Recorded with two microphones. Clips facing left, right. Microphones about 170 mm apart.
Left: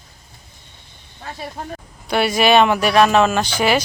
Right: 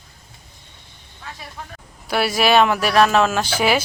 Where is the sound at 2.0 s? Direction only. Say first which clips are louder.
Left 2 dB; 5° right (ahead or behind).